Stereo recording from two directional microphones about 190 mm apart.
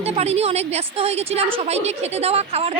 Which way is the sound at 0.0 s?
35° right (ahead or behind).